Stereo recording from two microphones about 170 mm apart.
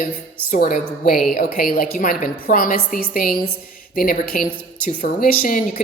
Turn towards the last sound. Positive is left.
turn(degrees=55)  # may be behind; listen again after turning